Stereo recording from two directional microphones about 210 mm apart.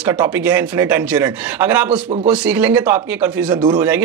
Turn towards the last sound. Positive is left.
turn(degrees=-20)  # may be behind; listen again after turning